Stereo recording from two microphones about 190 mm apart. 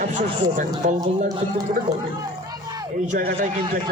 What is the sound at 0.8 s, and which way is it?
Speech, 35° right (ahead or behind).